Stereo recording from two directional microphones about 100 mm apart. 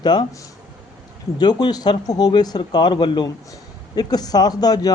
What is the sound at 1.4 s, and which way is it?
Speech, 45° left (ahead or behind).